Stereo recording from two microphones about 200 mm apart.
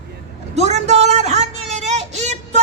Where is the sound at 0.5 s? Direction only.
35° right (ahead or behind).